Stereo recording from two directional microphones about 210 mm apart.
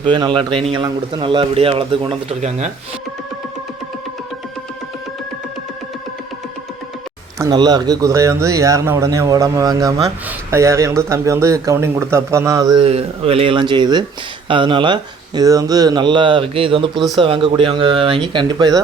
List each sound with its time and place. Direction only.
0.0 s a man's voice: 25° right (ahead or behind)
7.3 s a man's voice: 20° right (ahead or behind)